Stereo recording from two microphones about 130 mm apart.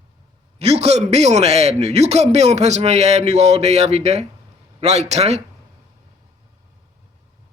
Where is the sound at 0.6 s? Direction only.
55° right (ahead or behind).